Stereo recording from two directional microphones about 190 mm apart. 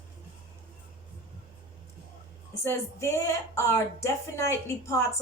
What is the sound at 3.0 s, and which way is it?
A woman's voice, 15° left (ahead or behind).